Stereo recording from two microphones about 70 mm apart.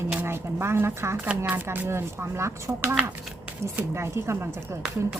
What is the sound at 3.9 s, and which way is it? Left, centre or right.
Speech, right.